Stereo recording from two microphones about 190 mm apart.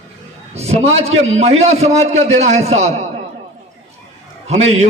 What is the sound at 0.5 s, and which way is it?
A man's voice, 35° right (ahead or behind).